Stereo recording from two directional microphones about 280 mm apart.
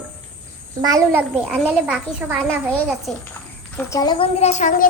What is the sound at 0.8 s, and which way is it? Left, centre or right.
A child's voice, centre.